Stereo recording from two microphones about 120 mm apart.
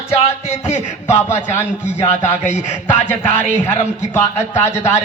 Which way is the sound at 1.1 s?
20° left (ahead or behind).